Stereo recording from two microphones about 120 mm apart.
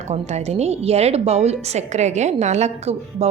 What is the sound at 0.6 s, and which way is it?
A woman's voice, 60° right (ahead or behind).